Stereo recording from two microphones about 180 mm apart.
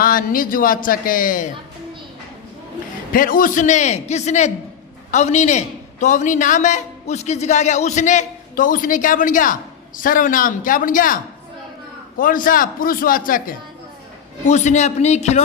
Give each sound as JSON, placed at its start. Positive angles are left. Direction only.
{"t": 0.0, "sound": "a man's voice", "side_deg": 50}
{"t": 3.1, "sound": "a man's voice", "side_deg": 50}